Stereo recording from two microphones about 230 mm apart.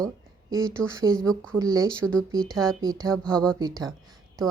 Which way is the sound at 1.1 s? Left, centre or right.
Centre.